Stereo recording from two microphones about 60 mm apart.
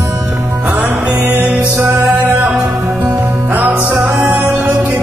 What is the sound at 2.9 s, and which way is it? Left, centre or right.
Music, right.